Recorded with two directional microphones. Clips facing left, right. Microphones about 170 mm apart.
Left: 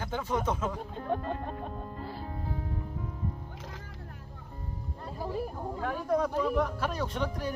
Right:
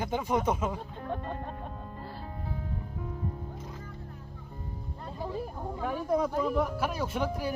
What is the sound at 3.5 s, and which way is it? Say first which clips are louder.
Music: right 2 dB; 90° left.